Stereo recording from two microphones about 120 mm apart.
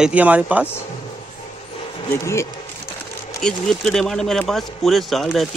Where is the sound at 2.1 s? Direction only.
25° left (ahead or behind).